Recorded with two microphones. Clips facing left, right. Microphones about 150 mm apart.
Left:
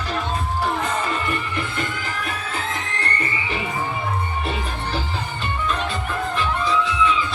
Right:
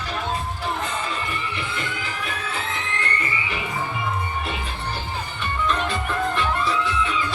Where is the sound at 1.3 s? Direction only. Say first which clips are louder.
Left 3 dB; 50° left (ahead or behind).